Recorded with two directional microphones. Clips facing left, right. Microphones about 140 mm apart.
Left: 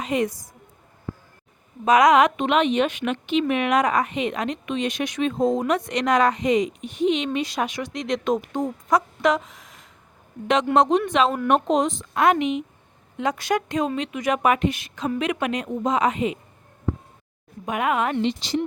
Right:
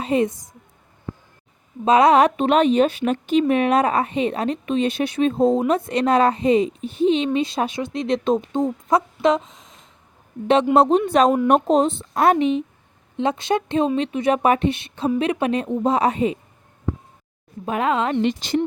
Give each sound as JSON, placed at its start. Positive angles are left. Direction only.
{"t": 0.0, "sound": "speech", "side_deg": -30}
{"t": 1.8, "sound": "speech", "side_deg": -30}
{"t": 17.7, "sound": "speech", "side_deg": -30}
{"t": 18.2, "sound": "speech", "side_deg": -50}